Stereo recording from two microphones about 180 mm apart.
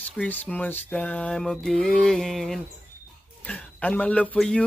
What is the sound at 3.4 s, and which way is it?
A man's voice, 10° left (ahead or behind).